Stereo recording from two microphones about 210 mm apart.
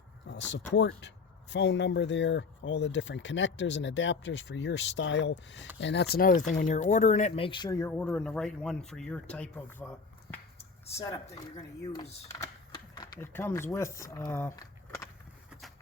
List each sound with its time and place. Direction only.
0.3 s speech: 60° left (ahead or behind)
6.5 s speech: 35° left (ahead or behind); by 9.9 s 10° left (ahead or behind)
10.6 s finger snapping: 30° left (ahead or behind)
11.0 s speech: 20° left (ahead or behind)